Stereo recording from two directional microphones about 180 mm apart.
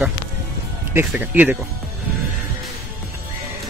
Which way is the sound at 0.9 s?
10° right (ahead or behind).